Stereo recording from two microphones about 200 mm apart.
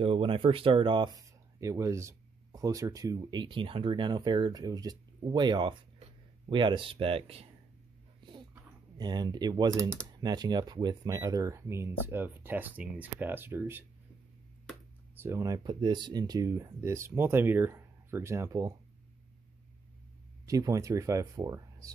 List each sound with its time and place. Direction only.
0.0 s speech: 30° right (ahead or behind)
8.2 s dog: 25° right (ahead or behind)
8.9 s speech: 20° right (ahead or behind)
15.1 s speech: 15° right (ahead or behind)
20.4 s speech: 15° right (ahead or behind)